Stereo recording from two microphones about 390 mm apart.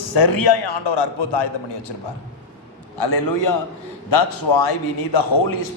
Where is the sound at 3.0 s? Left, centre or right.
Left.